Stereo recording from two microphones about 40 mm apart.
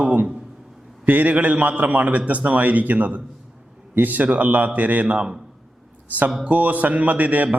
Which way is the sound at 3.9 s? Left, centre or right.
Right.